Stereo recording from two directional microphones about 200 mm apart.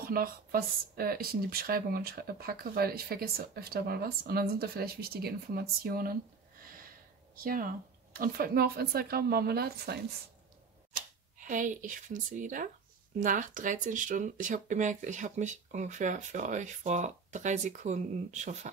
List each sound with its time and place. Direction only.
0.0 s speech: 45° right (ahead or behind)
7.3 s speech: 45° right (ahead or behind)
11.0 s speech: 40° right (ahead or behind)